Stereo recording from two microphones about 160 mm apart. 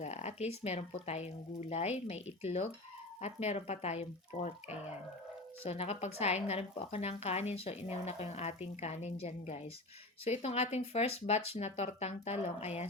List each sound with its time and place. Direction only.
0.0 s a woman's voice: 45° left (ahead or behind)